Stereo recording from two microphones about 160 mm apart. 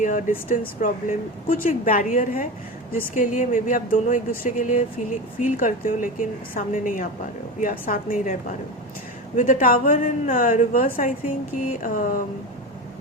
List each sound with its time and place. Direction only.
0.0 s a woman's voice: 55° left (ahead or behind)